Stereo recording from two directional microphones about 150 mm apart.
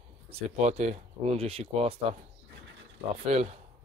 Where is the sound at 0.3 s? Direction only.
45° right (ahead or behind).